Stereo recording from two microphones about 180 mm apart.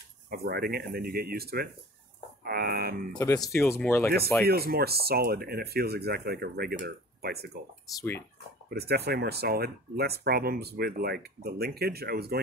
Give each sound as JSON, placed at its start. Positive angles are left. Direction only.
{"t": 0.3, "sound": "speech", "side_deg": -55}
{"t": 3.2, "sound": "speech", "side_deg": 15}
{"t": 4.5, "sound": "speech", "side_deg": -60}
{"t": 7.9, "sound": "speech", "side_deg": 15}
{"t": 8.6, "sound": "speech", "side_deg": -60}